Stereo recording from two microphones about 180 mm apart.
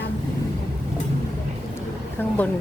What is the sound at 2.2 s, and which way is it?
Speech, 10° left (ahead or behind).